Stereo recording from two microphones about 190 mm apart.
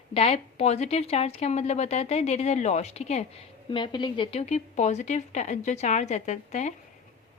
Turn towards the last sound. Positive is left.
turn(degrees=40)  # may be behind; listen again after turning